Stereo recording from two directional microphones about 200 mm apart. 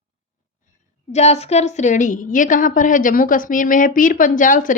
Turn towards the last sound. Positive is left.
turn(degrees=40)  # may be behind; listen again after turning